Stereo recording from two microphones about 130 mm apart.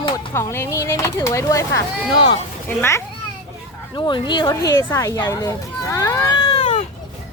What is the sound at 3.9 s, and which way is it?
Speech, 35° left (ahead or behind).